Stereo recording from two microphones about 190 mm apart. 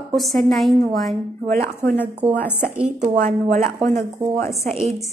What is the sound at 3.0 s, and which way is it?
Speech, 35° right (ahead or behind).